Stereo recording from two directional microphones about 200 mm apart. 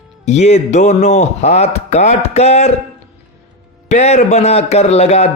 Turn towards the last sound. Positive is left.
turn(degrees=35)  # may be behind; listen again after turning